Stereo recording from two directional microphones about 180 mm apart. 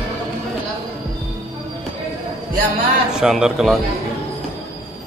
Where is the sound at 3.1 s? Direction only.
5° right (ahead or behind).